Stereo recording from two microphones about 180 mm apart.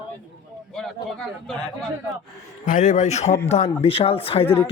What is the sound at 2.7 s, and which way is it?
A man's voice, 45° left (ahead or behind).